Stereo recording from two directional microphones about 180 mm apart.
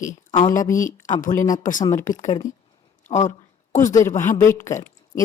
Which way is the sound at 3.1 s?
40° left (ahead or behind).